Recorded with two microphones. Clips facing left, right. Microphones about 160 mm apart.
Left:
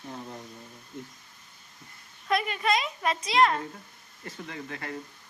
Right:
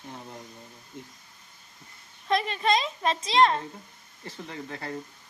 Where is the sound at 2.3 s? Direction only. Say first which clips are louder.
Right 2 dB; 30° right (ahead or behind).